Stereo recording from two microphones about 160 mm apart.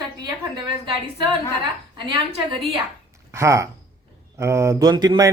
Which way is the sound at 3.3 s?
20° right (ahead or behind).